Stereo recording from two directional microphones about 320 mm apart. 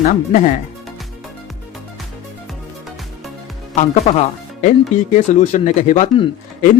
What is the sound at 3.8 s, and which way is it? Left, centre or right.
Speech, centre.